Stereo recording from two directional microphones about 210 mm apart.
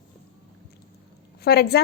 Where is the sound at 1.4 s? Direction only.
50° left (ahead or behind).